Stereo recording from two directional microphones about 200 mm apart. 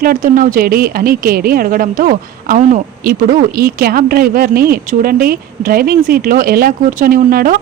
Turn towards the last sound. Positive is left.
turn(degrees=-45)  # may be behind; listen again after turning